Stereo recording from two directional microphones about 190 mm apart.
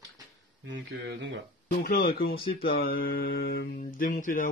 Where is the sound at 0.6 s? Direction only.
70° right (ahead or behind).